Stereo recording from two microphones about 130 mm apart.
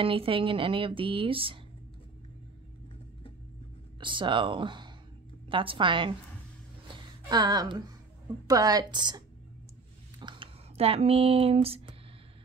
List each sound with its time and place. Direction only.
0.0 s speech: 45° right (ahead or behind)
4.0 s speech: 40° right (ahead or behind)
6.9 s a sound: 30° right (ahead or behind)
8.5 s a woman's voice: 30° right (ahead or behind)
10.2 s speech: 40° right (ahead or behind)